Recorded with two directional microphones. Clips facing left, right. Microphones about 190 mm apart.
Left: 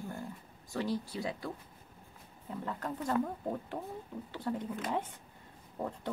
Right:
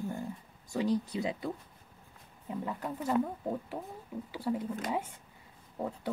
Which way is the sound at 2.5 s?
10° right (ahead or behind).